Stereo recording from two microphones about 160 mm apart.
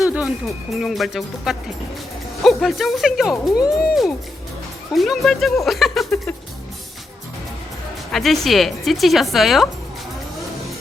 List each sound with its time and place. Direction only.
0.0 s speech: 5° right (ahead or behind)
8.1 s speech: centre (ahead or behind)